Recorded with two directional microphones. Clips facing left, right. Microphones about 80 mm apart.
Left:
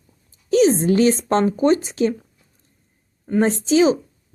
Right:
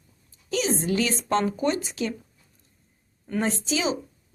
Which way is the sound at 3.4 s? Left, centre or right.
Left.